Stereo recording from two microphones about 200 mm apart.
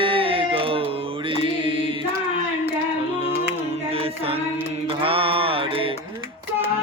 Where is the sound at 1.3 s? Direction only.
25° right (ahead or behind).